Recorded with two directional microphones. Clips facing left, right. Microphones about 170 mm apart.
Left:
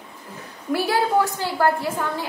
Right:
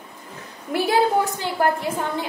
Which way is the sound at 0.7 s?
20° right (ahead or behind).